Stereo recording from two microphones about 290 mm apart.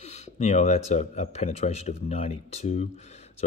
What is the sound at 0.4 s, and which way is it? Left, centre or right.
A man's voice, left.